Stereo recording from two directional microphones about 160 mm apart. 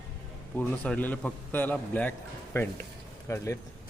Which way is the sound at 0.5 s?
10° left (ahead or behind).